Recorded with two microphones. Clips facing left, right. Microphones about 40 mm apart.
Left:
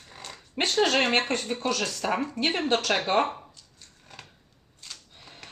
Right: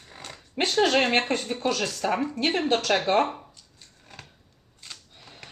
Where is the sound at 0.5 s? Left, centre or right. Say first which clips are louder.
Right 2 dB; centre.